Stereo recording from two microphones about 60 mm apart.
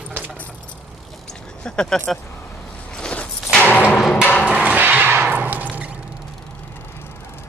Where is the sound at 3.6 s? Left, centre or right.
Left.